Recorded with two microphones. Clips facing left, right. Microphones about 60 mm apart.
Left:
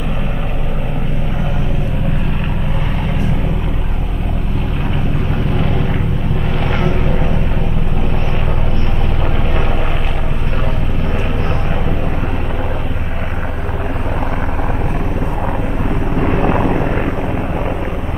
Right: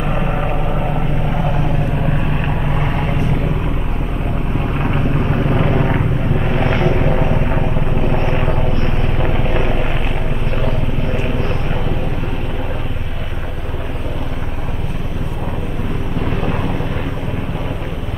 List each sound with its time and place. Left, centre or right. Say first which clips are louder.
5.5 s vehicle: right 3 dB; right
6.7 s vehicle: right 1 dB; centre
16.2 s vehicle: left 6 dB; left